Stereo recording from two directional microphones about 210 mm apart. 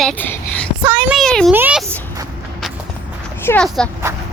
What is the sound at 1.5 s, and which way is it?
Speech, 10° right (ahead or behind).